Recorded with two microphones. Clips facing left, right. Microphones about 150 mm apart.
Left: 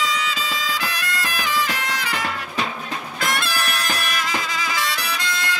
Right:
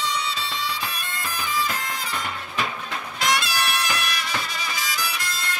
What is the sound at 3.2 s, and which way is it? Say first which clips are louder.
Music: right 1 dB; 50° left (ahead or behind).